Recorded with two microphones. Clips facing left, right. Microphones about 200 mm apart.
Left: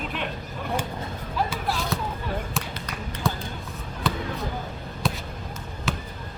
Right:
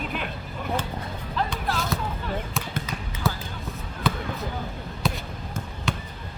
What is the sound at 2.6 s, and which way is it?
Basketball bounce, centre (ahead or behind).